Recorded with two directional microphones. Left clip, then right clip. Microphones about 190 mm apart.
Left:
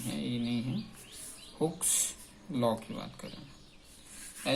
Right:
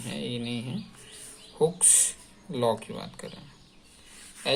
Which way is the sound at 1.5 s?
50° right (ahead or behind).